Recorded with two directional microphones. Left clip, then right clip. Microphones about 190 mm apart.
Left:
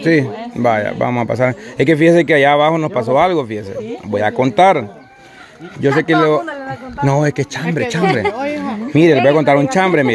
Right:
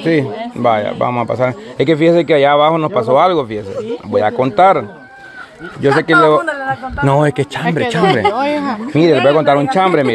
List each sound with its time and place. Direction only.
0.0 s speech: 15° left (ahead or behind); by 7.6 s centre (ahead or behind)
8.0 s speech: 20° right (ahead or behind)
8.4 s speech: 55° right (ahead or behind)
8.9 s speech: 20° left (ahead or behind)